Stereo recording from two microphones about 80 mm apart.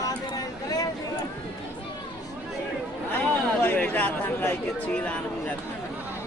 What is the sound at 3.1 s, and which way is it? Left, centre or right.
Speech, left.